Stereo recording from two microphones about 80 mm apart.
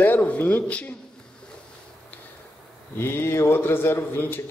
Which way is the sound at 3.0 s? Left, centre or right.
Left.